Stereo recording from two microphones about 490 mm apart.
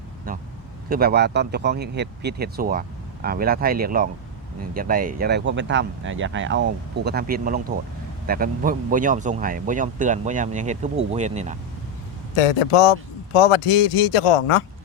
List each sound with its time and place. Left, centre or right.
0.3 s speech: centre
12.4 s a man's voice: left